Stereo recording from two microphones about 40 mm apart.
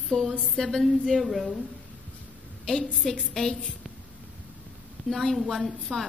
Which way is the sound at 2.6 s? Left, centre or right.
Centre.